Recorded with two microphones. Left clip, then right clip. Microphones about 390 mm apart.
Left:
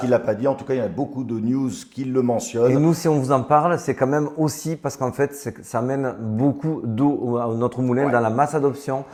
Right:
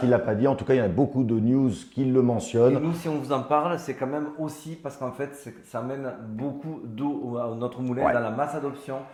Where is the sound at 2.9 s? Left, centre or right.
Left.